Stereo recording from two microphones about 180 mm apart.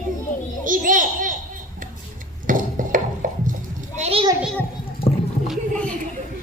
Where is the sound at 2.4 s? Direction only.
50° right (ahead or behind).